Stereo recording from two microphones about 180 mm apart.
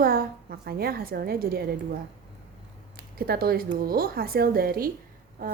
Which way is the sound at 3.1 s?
55° right (ahead or behind).